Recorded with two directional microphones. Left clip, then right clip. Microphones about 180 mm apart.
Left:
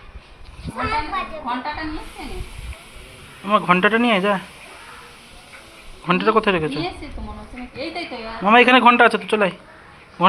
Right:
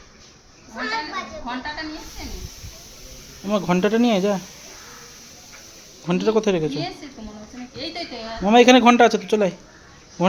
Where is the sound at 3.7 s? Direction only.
25° right (ahead or behind).